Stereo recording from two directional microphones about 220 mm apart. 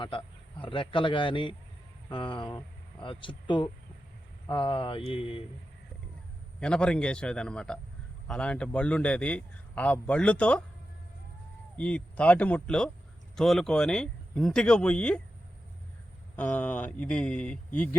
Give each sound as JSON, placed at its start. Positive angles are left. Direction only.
{"t": 0.0, "sound": "a man's voice", "side_deg": 25}
{"t": 6.6, "sound": "a man's voice", "side_deg": 5}
{"t": 11.8, "sound": "a man's voice", "side_deg": 5}
{"t": 16.3, "sound": "speech", "side_deg": 10}